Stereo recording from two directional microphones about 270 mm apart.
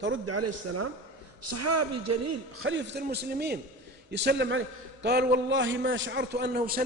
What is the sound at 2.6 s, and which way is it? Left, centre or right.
A man's voice, right.